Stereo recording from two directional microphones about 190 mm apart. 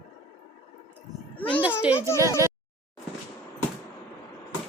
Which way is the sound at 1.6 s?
10° right (ahead or behind).